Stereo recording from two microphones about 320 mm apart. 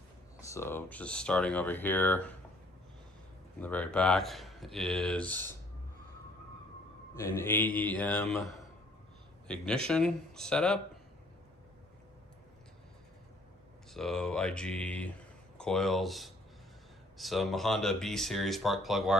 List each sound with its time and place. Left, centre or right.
0.4 s speech: centre
3.6 s speech: centre
7.3 s speech: centre
13.9 s speech: centre